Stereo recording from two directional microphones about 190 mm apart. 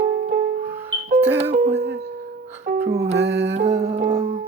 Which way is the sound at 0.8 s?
35° right (ahead or behind).